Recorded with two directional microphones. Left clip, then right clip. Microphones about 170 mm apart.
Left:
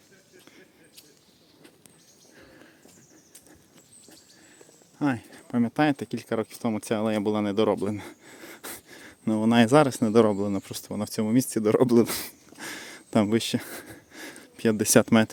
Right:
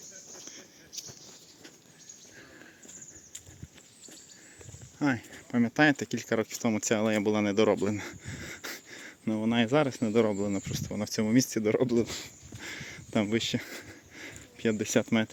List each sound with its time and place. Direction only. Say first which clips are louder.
4.9 s speech: left 2 dB; 20° left (ahead or behind)
9.3 s a man's voice: left 7 dB; 40° left (ahead or behind)
10.3 s speech: left 3 dB; 25° left (ahead or behind)
11.7 s speech: left 7 dB; 45° left (ahead or behind)
12.0 s speech: left 6 dB; 65° left (ahead or behind)
12.5 s a sound: left 2 dB; 30° left (ahead or behind)